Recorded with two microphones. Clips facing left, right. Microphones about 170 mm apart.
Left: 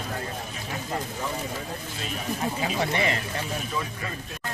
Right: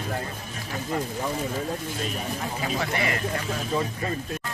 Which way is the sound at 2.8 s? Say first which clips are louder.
Left 1 dB; 25° left (ahead or behind).